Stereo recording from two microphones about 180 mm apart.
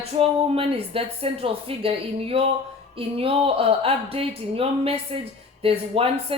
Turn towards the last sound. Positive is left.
turn(degrees=-30)  # may be behind; listen again after turning